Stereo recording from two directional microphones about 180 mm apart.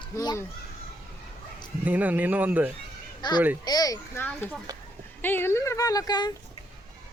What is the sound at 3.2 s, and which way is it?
A child's voice, 25° left (ahead or behind).